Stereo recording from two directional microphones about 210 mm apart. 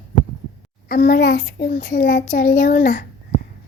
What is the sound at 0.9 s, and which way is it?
Child singing, 40° left (ahead or behind).